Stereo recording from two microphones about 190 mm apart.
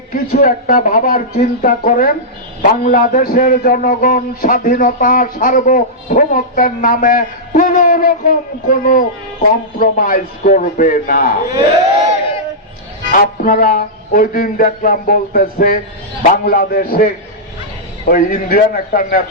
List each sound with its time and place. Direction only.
0.1 s a man's voice: 50° left (ahead or behind)
13.1 s a man's voice: 45° left (ahead or behind)
18.1 s a man's voice: 45° left (ahead or behind)